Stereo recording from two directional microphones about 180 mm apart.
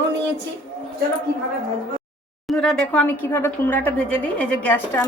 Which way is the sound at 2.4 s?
Centre (ahead or behind).